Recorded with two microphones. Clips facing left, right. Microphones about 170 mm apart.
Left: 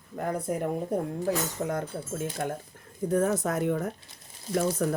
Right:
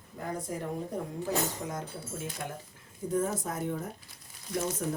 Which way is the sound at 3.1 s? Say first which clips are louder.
Left 5 dB; 70° left (ahead or behind).